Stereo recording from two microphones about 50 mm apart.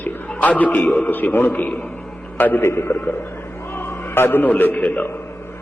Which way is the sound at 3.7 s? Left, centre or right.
Left.